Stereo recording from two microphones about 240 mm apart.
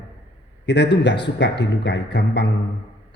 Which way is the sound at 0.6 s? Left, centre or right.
Left.